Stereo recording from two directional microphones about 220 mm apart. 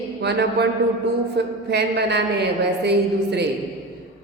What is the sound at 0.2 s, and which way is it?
Speech, 50° right (ahead or behind).